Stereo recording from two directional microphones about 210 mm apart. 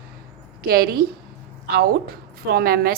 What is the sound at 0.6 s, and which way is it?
Speech, 45° right (ahead or behind).